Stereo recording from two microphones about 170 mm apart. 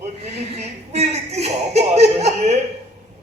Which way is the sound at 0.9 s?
40° right (ahead or behind).